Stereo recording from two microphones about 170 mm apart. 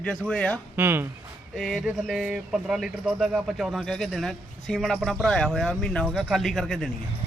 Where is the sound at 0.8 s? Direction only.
15° right (ahead or behind).